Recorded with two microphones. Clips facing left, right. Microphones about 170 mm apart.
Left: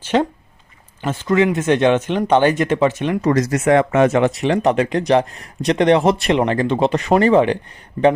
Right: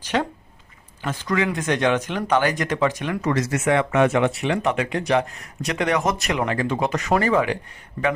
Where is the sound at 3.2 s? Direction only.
40° left (ahead or behind).